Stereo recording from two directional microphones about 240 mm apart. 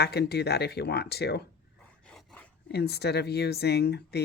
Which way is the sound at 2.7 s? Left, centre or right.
Left.